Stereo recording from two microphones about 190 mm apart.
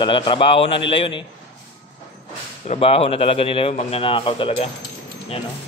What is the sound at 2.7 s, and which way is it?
Speech, 30° left (ahead or behind).